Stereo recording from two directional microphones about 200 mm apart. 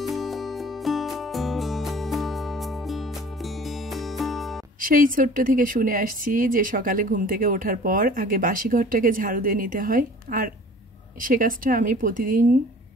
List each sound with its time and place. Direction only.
0.0 s music: centre (ahead or behind)
4.8 s a woman's voice: 45° right (ahead or behind)